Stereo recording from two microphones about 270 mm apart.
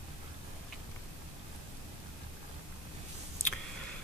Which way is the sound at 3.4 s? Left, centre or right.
Left.